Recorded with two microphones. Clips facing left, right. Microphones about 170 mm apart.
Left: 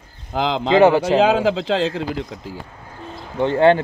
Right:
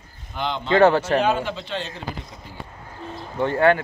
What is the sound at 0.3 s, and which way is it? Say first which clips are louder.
Speech: left 5 dB; 90° left.